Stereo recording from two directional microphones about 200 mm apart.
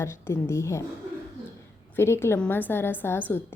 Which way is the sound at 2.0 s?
10° left (ahead or behind).